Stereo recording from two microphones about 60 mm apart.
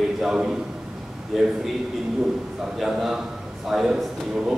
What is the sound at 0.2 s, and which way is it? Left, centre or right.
A man's voice, centre.